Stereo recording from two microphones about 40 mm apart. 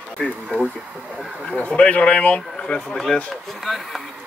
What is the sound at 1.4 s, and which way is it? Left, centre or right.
Speech, left.